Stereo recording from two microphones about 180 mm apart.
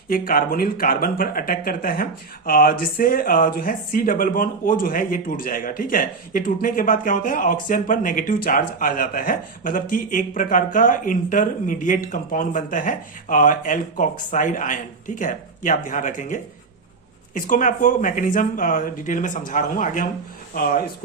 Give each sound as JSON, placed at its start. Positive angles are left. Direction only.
{"t": 0.1, "sound": "a man's voice", "side_deg": 55}